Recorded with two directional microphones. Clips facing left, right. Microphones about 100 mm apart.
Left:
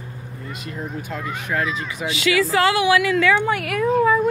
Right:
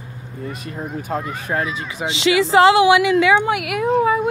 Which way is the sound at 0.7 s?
40° right (ahead or behind).